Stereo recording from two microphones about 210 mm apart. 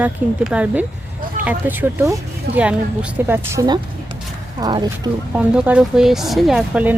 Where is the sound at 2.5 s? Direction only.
50° right (ahead or behind).